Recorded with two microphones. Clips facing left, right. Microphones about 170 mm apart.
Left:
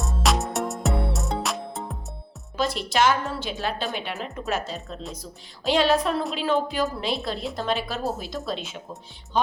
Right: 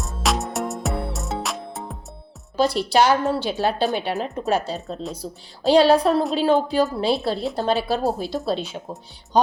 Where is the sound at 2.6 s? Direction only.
35° right (ahead or behind).